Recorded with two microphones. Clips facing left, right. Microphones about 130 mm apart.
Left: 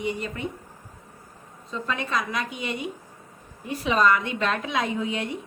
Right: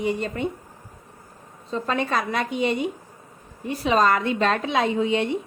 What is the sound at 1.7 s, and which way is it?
A woman's voice, 35° right (ahead or behind).